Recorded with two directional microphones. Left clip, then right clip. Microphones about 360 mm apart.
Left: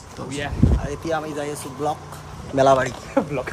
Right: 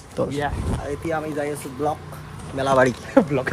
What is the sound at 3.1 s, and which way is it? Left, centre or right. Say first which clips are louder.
Speech: right 4 dB; right.